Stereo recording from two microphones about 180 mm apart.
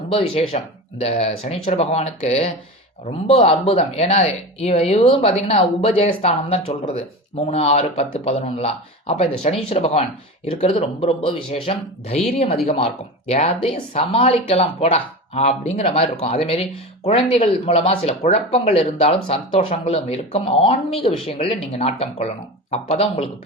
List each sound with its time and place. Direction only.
0.1 s speech: 30° left (ahead or behind)